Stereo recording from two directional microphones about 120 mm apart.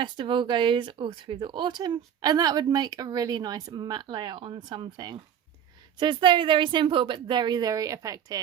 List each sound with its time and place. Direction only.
0.0 s speech: 40° right (ahead or behind)